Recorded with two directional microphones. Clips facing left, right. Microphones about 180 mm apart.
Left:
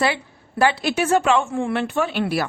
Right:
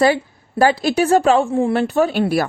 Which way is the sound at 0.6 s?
40° right (ahead or behind).